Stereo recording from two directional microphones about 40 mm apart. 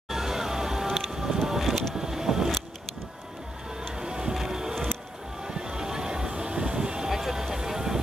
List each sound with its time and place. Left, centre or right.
0.1 s music: centre
2.0 s vehicle: centre
3.9 s music: centre
5.4 s vehicle: centre